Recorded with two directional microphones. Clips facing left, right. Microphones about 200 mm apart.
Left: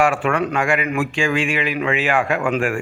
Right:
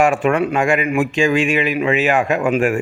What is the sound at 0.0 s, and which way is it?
A man's voice, 20° right (ahead or behind).